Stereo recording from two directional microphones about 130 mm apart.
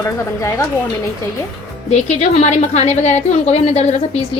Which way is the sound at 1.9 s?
60° left (ahead or behind).